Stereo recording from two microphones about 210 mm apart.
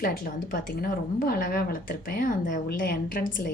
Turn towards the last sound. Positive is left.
turn(degrees=40)  # may be behind; listen again after turning